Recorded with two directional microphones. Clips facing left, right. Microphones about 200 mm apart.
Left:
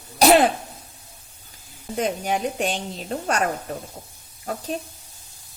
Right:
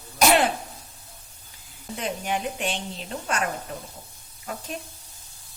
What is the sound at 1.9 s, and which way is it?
A woman's voice, 40° left (ahead or behind).